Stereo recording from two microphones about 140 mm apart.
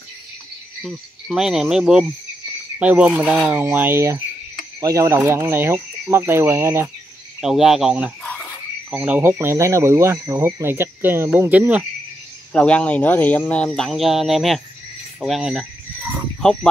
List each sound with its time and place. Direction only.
0.8 s speech: 5° right (ahead or behind)
7.4 s speech: 5° right (ahead or behind)
12.5 s speech: 10° left (ahead or behind)